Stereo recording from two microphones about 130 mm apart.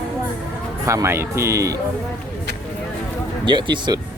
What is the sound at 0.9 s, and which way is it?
Speech, 20° right (ahead or behind).